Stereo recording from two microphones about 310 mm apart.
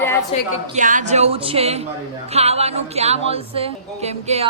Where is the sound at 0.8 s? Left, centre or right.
Right.